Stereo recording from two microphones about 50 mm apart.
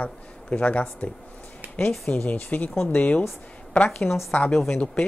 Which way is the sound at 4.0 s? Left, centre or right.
Centre.